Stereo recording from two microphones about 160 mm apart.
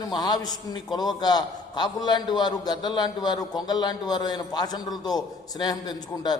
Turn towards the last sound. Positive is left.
turn(degrees=25)  # may be behind; listen again after turning